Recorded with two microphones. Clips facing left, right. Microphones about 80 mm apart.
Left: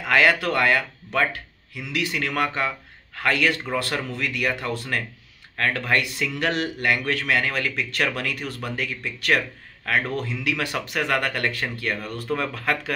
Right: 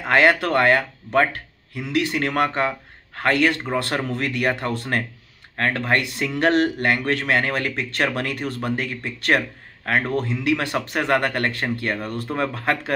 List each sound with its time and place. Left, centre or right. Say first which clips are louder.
0.0 s a man's voice: right 2 dB; right